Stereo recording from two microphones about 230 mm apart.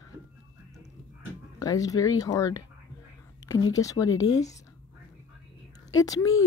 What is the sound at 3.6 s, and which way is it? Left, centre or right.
Speech, centre.